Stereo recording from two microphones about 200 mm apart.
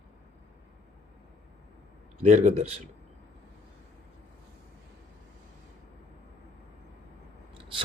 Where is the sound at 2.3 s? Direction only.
35° right (ahead or behind).